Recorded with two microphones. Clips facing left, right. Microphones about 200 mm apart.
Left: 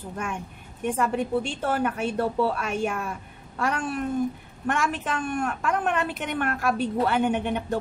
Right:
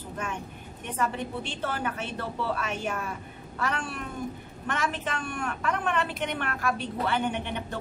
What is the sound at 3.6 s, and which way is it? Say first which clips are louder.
A woman's voice: left 6 dB; 45° left (ahead or behind).